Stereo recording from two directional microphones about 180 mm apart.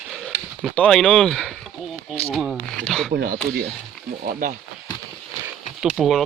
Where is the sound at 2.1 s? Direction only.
5° left (ahead or behind).